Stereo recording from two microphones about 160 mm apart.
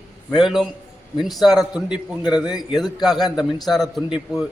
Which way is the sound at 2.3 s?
5° right (ahead or behind).